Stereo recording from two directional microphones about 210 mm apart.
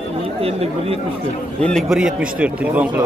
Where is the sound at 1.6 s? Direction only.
Centre (ahead or behind).